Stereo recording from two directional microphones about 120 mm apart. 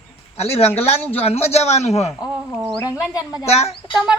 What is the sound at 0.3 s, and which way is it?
A man's voice, 60° left (ahead or behind).